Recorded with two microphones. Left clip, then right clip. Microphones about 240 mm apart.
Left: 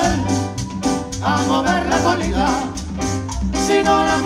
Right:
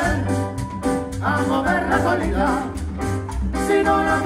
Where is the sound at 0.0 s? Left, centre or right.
Left.